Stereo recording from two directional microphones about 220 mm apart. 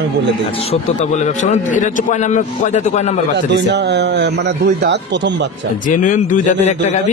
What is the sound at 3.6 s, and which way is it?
A man's voice, 50° right (ahead or behind).